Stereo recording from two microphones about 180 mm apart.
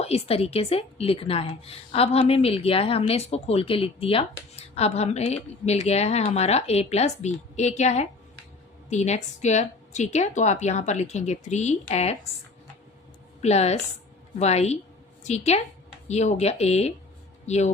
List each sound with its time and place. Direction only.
0.0 s a woman's voice: 35° left (ahead or behind)
13.4 s a woman's voice: 35° left (ahead or behind)